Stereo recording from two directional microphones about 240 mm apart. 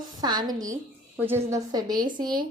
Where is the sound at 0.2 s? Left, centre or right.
Centre.